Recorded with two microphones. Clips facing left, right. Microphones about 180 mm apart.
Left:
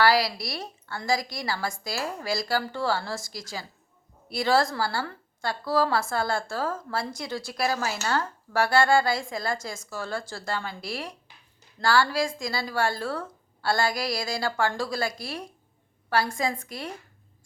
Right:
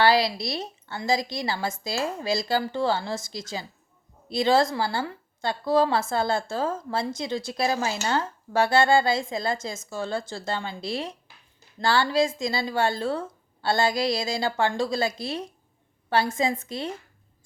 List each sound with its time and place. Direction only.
0.0 s a woman's voice: 25° right (ahead or behind)